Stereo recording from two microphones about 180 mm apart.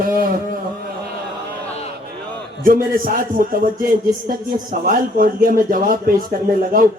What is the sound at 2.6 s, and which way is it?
A man's voice, 50° right (ahead or behind).